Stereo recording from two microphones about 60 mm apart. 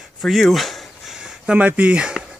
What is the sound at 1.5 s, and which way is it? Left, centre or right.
Speech, right.